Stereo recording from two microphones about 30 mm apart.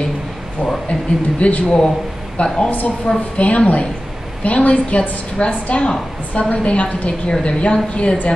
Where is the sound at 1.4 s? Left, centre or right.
Left.